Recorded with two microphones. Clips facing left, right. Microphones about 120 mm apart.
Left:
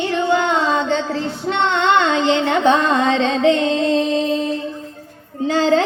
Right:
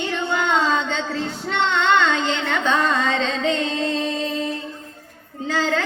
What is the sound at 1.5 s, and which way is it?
Music, 20° left (ahead or behind).